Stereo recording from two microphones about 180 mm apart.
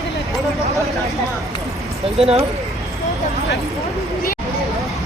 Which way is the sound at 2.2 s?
35° right (ahead or behind).